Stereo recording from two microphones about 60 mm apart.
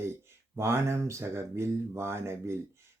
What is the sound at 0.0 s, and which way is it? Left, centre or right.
Speech, right.